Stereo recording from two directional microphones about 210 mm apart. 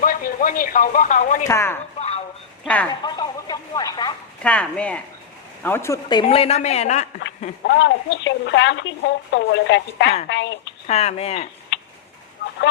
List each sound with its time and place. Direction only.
0.0 s speech: 40° left (ahead or behind)
1.5 s speech: 10° left (ahead or behind)
2.0 s a sound: 30° left (ahead or behind)
2.6 s speech: 5° left (ahead or behind)
3.0 s a sound: 20° left (ahead or behind)
4.4 s speech: 5° left (ahead or behind); by 7.1 s 35° left (ahead or behind)
7.7 s a woman's voice: 55° left (ahead or behind)
10.8 s speech: 30° left (ahead or behind)
11.7 s tick-tock: 60° left (ahead or behind)